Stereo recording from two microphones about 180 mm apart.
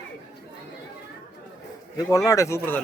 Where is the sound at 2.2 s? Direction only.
15° left (ahead or behind).